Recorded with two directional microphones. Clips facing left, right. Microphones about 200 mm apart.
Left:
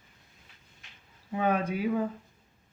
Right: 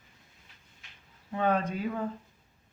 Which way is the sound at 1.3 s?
10° left (ahead or behind).